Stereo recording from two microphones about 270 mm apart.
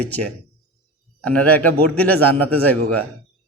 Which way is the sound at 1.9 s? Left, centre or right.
Centre.